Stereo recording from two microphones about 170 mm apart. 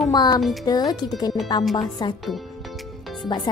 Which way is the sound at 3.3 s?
25° left (ahead or behind).